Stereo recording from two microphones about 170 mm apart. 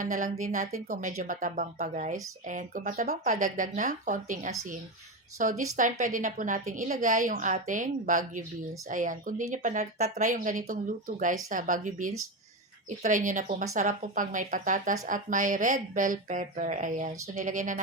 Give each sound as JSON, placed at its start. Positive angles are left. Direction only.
{"t": 0.0, "sound": "a woman's voice", "side_deg": -45}